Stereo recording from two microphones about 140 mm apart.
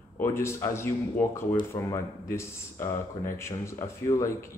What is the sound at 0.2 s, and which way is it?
Speech, 20° left (ahead or behind).